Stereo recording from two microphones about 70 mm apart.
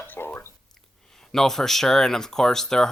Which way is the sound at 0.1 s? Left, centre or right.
Left.